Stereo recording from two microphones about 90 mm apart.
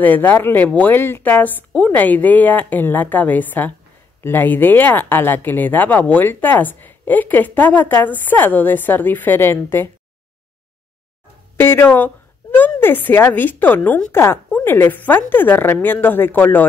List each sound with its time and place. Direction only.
0.0 s speech: 20° left (ahead or behind)
11.6 s speech: 25° left (ahead or behind)